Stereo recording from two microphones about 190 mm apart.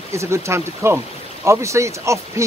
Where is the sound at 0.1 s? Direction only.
15° right (ahead or behind).